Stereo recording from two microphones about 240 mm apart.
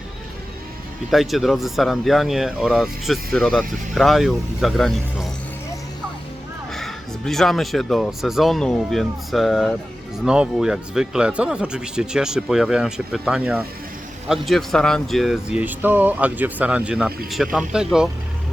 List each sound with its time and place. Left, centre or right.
1.1 s speech: centre
6.7 s speech: centre